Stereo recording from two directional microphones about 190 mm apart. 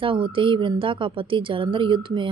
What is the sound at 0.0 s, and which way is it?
A woman's voice, 25° right (ahead or behind).